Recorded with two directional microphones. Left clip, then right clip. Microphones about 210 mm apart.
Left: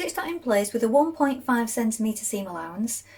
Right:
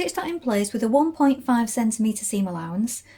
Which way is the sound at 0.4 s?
45° right (ahead or behind).